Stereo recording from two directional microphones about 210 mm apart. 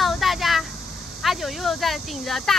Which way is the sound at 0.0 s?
Centre (ahead or behind).